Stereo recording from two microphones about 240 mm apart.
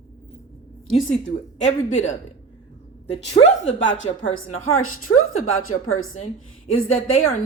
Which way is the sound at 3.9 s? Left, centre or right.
Left.